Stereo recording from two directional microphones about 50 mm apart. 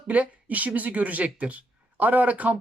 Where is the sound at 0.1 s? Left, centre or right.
Right.